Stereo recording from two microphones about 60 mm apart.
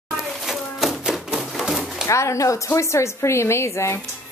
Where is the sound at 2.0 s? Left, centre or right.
Left.